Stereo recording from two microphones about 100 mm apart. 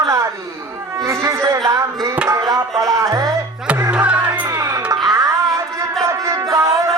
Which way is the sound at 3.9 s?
15° right (ahead or behind).